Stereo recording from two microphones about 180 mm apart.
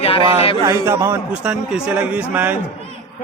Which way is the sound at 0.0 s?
30° left (ahead or behind).